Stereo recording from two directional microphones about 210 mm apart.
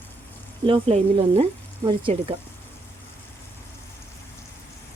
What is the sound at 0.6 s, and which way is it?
Speech, 25° right (ahead or behind).